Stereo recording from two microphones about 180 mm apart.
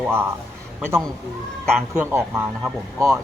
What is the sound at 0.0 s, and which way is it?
Speech, 10° right (ahead or behind).